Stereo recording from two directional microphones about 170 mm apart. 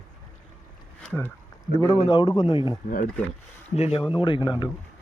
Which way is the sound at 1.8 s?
20° left (ahead or behind).